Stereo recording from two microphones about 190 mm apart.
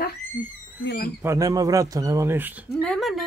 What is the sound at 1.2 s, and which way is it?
Speech, 15° right (ahead or behind).